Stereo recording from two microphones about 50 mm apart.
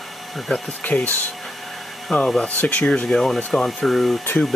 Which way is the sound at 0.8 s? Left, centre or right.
Left.